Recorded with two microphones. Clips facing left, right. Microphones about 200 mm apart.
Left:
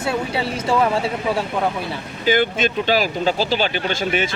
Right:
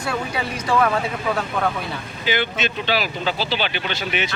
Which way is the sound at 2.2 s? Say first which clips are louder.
Left 5 dB; 45° left (ahead or behind).